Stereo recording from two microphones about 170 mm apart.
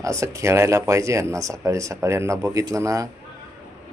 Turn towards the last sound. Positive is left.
turn(degrees=-20)  # may be behind; listen again after turning